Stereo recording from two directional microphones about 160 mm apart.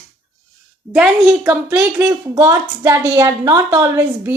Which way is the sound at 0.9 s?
5° right (ahead or behind).